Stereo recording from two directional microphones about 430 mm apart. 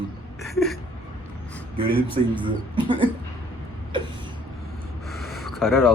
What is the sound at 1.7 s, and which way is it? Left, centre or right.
Speech, centre.